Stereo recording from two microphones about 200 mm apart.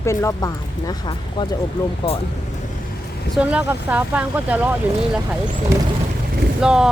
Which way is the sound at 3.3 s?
5° right (ahead or behind).